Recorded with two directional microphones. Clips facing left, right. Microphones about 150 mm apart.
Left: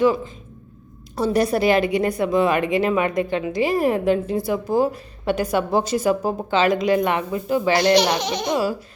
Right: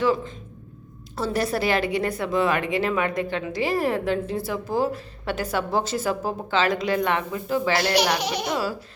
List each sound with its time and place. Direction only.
1.1 s a woman's voice: 15° left (ahead or behind)
8.2 s speech: 10° right (ahead or behind)
8.4 s a woman's voice: 15° left (ahead or behind)